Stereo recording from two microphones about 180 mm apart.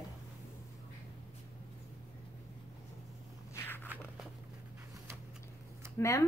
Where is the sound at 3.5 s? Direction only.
10° left (ahead or behind).